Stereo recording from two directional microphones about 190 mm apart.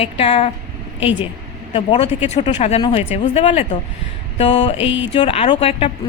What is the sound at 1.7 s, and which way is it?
Speech, 30° left (ahead or behind).